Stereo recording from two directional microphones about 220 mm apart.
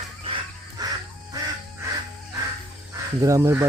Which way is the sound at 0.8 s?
15° right (ahead or behind).